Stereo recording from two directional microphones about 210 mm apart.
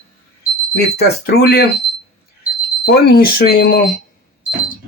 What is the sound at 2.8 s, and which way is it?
Speech, 50° left (ahead or behind).